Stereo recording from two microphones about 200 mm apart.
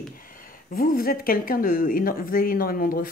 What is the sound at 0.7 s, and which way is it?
Speech, 45° left (ahead or behind).